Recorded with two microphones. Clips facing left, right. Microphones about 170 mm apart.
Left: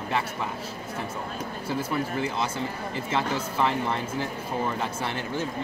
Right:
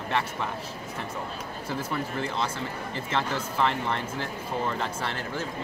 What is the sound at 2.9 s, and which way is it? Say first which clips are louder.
Speech: left 1 dB; 10° left (ahead or behind).